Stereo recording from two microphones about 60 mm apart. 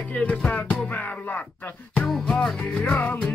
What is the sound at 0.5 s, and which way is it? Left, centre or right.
Music, left.